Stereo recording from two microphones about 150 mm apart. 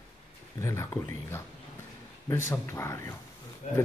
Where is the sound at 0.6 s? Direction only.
20° left (ahead or behind).